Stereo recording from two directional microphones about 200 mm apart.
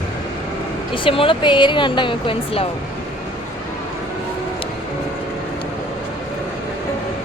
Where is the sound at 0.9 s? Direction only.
25° left (ahead or behind).